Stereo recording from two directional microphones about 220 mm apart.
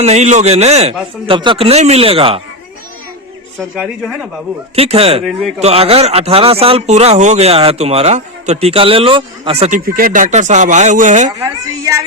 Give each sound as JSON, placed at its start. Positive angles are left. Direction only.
{"t": 0.0, "sound": "speech", "side_deg": -30}
{"t": 3.6, "sound": "speech", "side_deg": 0}
{"t": 4.7, "sound": "speech", "side_deg": -25}
{"t": 11.3, "sound": "speech", "side_deg": -15}